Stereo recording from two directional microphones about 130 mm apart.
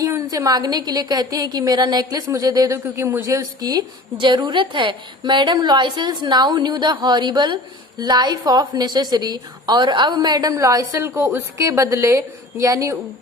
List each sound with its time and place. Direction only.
0.0 s a woman's voice: 25° right (ahead or behind)